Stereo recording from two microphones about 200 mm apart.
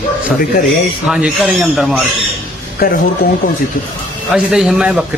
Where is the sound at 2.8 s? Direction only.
50° left (ahead or behind).